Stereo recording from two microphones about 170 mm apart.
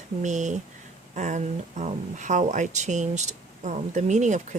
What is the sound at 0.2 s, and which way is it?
Speech, 45° right (ahead or behind).